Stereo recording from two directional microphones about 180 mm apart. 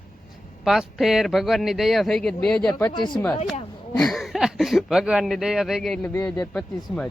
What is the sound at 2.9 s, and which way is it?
Speech, 25° left (ahead or behind).